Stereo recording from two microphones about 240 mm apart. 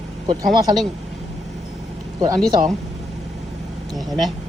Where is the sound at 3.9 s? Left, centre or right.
Centre.